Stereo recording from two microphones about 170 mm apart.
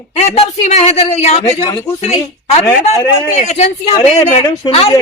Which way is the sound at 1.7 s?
20° left (ahead or behind).